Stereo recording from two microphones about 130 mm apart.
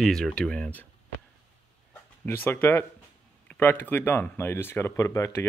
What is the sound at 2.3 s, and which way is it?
Speech, 20° left (ahead or behind).